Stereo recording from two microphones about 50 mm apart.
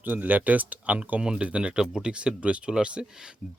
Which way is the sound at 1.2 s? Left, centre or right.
Centre.